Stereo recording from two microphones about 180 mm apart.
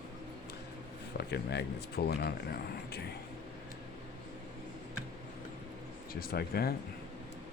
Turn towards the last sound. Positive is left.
turn(degrees=60)  # may be behind; listen again after turning